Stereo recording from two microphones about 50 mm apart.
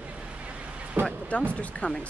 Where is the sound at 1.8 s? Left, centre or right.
Left.